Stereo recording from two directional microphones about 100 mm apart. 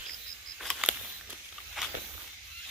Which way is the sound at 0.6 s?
Centre (ahead or behind).